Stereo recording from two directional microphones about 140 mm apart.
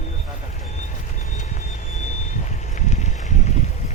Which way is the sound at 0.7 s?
60° left (ahead or behind).